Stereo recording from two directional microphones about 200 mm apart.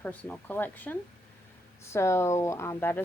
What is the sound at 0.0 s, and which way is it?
Speech, 10° left (ahead or behind).